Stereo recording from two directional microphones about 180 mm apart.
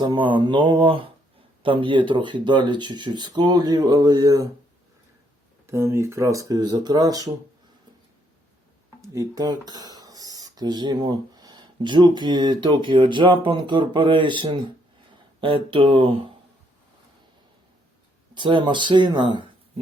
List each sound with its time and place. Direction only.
0.0 s speech: 25° right (ahead or behind)
5.6 s speech: 15° right (ahead or behind)
9.0 s speech: 20° right (ahead or behind)
18.3 s speech: 25° right (ahead or behind)